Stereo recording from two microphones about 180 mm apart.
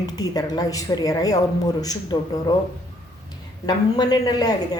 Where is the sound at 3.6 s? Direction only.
20° left (ahead or behind).